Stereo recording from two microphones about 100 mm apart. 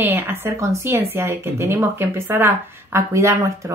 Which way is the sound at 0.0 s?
20° right (ahead or behind).